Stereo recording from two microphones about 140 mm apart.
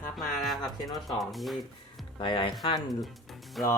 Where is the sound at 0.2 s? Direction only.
Centre (ahead or behind).